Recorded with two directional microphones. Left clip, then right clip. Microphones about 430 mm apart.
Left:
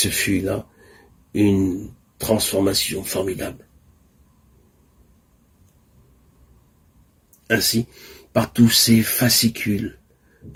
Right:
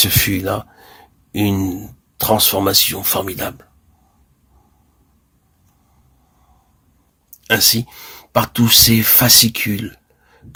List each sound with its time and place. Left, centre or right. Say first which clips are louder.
0.0 s speech: right 4 dB; right
7.3 s a sound: right 6 dB; right
8.3 s speech: right 4 dB; right